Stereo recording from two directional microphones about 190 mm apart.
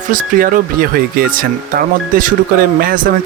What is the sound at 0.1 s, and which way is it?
Speech, 45° right (ahead or behind).